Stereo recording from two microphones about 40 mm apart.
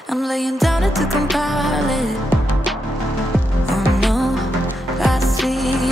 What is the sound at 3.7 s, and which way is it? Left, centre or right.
Music, centre.